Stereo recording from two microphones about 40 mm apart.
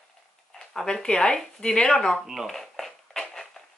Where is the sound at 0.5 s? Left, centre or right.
Centre.